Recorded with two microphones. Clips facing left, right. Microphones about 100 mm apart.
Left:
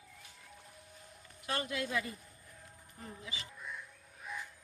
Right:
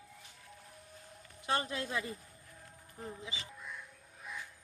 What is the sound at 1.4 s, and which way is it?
Speech, 30° right (ahead or behind).